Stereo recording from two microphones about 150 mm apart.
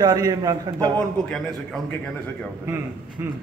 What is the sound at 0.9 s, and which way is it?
A man's voice, 5° left (ahead or behind).